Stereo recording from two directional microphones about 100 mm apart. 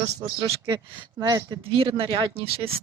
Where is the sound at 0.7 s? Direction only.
50° right (ahead or behind); by 2.8 s 70° right (ahead or behind).